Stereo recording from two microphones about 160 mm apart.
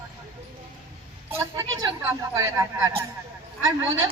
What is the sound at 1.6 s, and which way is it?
Speech, 15° right (ahead or behind).